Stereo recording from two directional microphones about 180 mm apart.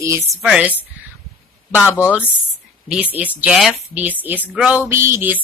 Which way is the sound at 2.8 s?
5° right (ahead or behind).